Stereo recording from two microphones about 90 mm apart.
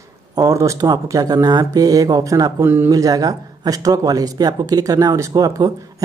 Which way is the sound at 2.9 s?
40° right (ahead or behind).